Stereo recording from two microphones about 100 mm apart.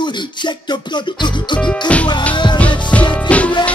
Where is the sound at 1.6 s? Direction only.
10° left (ahead or behind).